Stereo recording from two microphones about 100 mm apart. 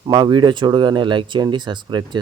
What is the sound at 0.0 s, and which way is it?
A man's voice, 50° right (ahead or behind).